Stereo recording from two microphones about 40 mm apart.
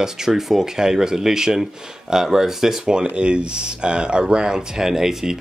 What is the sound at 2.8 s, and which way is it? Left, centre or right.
Speech, right.